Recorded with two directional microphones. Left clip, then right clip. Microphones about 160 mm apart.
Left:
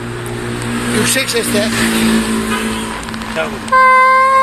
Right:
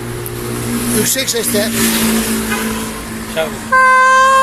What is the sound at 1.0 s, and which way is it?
Speech, 35° right (ahead or behind).